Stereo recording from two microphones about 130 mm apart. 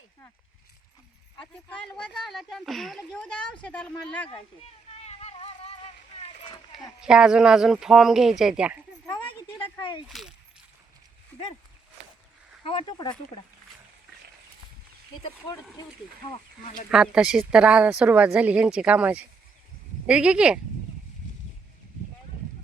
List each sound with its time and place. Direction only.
1.4 s speech: 10° left (ahead or behind)
4.9 s vehicle: 55° left (ahead or behind)
6.7 s speech: 5° right (ahead or behind)
10.1 s speech: centre (ahead or behind)
12.6 s speech: 35° left (ahead or behind)
16.9 s speech: 5° right (ahead or behind)